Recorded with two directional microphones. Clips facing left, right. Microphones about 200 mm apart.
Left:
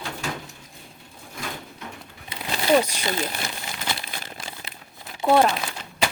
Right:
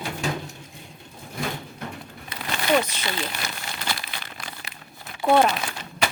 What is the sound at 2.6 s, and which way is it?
Speech, 30° left (ahead or behind).